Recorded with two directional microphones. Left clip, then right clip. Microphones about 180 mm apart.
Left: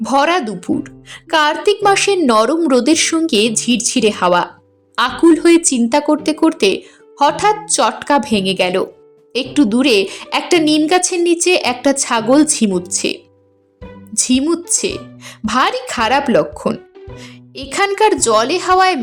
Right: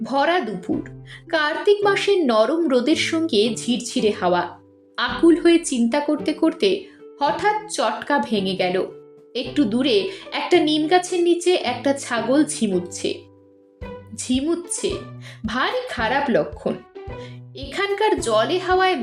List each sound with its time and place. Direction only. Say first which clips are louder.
0.0 s a woman's voice: left 6 dB; 40° left (ahead or behind)